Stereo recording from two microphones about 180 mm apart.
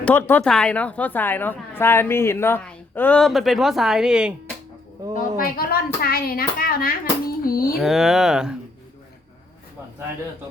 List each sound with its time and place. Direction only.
0.0 s speech: 10° left (ahead or behind)
5.1 s a child's voice: 55° left (ahead or behind)
7.8 s speech: centre (ahead or behind)